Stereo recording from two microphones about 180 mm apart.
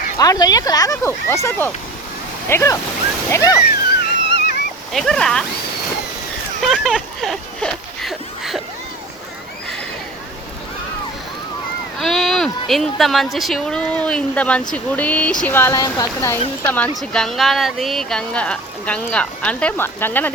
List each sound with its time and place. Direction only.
0.2 s speech: 20° left (ahead or behind)
3.7 s wheeze: 65° left (ahead or behind)
4.9 s speech: centre (ahead or behind)
6.6 s a sound: centre (ahead or behind)
11.9 s speech: centre (ahead or behind)